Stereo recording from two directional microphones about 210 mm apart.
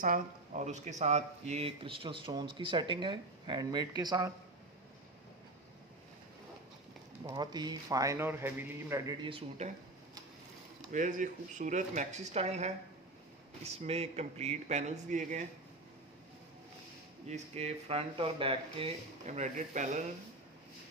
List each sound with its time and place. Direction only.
0.0 s speech: 35° right (ahead or behind); by 4.3 s 20° right (ahead or behind)
7.2 s a man's voice: 20° right (ahead or behind)
10.9 s speech: 40° right (ahead or behind)
13.7 s speech: 30° right (ahead or behind)
17.3 s speech: 30° right (ahead or behind)